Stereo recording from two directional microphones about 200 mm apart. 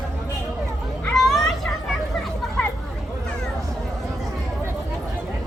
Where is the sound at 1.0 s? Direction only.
Centre (ahead or behind).